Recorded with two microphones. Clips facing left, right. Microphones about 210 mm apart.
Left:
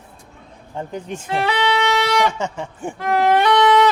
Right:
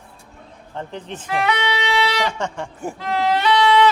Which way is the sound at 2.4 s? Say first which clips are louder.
Left 1 dB; 5° left (ahead or behind).